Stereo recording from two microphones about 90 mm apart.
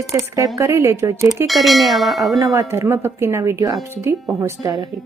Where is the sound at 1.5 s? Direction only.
Centre (ahead or behind).